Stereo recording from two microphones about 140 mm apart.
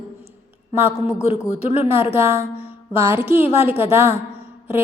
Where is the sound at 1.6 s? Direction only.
50° left (ahead or behind).